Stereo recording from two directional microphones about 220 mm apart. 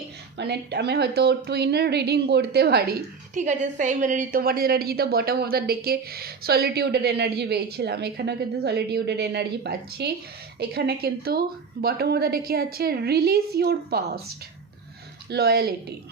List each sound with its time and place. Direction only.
0.3 s a woman's voice: 50° right (ahead or behind)
3.4 s a woman's voice: 35° right (ahead or behind)
15.3 s a woman's voice: 45° right (ahead or behind)